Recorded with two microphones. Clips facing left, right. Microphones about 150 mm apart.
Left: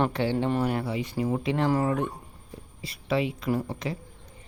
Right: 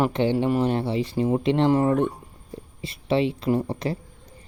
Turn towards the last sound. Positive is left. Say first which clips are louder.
# right 5 dB
turn(degrees=-35)  # may be behind; listen again after turning